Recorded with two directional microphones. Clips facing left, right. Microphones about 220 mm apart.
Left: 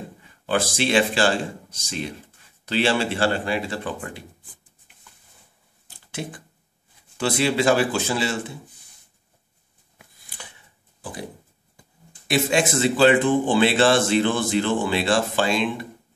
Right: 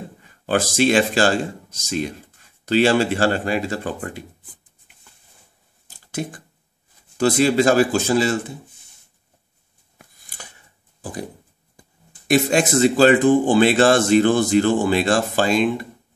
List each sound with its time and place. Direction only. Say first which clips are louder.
0.5 s speech: right 4 dB; 45° right (ahead or behind)
7.2 s speech: right 5 dB; 45° right (ahead or behind)
9.9 s a sound: right 1 dB; 45° right (ahead or behind)
12.3 s speech: right 4 dB; 45° right (ahead or behind)